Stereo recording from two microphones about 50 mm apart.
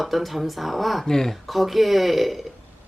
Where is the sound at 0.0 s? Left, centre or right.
Centre.